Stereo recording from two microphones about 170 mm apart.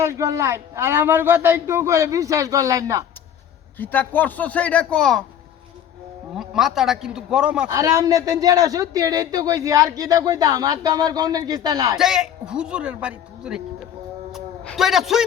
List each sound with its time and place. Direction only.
0.0 s speech: 15° right (ahead or behind)
3.8 s a man's voice: 10° left (ahead or behind)
6.3 s speech: 5° right (ahead or behind)
7.7 s a man's voice: 20° right (ahead or behind)
11.9 s speech: 5° right (ahead or behind)
14.3 s a sound: centre (ahead or behind)